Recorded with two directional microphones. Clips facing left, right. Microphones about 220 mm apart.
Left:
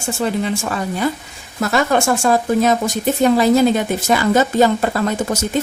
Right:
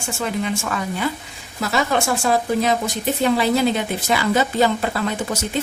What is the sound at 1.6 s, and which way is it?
Speech, 50° left (ahead or behind).